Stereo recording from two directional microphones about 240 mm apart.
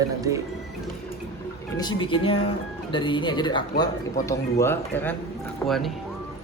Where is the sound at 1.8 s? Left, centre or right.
Centre.